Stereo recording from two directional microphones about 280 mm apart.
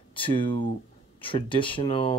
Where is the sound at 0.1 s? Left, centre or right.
Centre.